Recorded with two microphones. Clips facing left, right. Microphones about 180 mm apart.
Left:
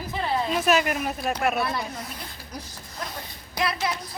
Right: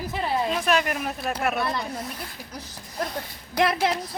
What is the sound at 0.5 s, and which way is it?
Speech, 5° left (ahead or behind).